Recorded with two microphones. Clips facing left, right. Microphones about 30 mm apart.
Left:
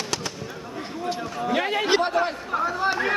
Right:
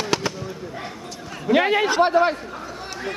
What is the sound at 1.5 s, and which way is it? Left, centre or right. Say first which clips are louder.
Speech: right 7 dB; right.